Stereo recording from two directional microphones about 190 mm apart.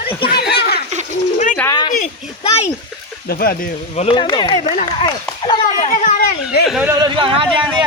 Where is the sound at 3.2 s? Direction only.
55° left (ahead or behind).